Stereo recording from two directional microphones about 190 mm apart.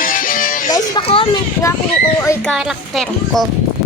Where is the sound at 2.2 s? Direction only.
10° left (ahead or behind).